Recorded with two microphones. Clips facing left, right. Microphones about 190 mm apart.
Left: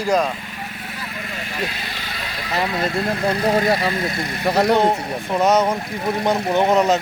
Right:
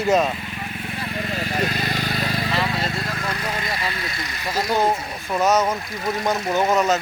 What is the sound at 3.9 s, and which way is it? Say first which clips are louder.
Speech: left 7 dB; 50° left (ahead or behind).